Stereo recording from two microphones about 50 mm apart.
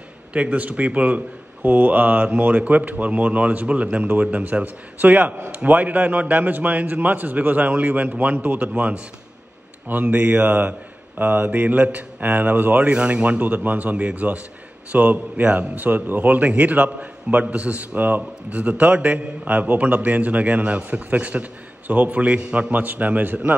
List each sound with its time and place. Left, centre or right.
0.3 s a man's voice: right
1.6 s a man's voice: right
9.8 s a man's voice: right
12.9 s a man's voice: right